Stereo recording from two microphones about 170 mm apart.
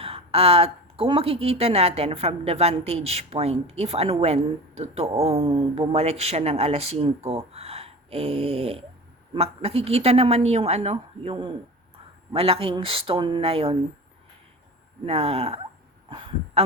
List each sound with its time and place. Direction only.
0.0 s a woman's voice: 35° right (ahead or behind)
15.0 s a woman's voice: 35° right (ahead or behind)
16.0 s a sound: 30° right (ahead or behind)